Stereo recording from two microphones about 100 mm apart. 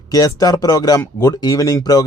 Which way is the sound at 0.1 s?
35° left (ahead or behind).